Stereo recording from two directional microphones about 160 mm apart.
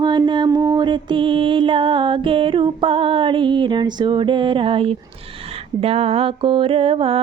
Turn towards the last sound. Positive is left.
turn(degrees=-35)  # may be behind; listen again after turning